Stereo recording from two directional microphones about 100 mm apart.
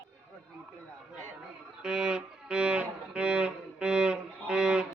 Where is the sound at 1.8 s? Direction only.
5° right (ahead or behind).